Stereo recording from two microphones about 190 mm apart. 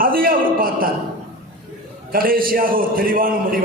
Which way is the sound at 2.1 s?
50° right (ahead or behind).